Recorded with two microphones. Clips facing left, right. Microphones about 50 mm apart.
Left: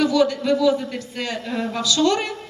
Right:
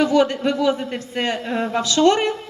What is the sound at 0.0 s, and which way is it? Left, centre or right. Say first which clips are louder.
A man's voice: right 2 dB; right.